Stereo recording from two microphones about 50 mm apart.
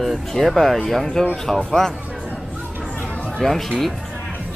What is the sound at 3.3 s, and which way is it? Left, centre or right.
Speech, centre.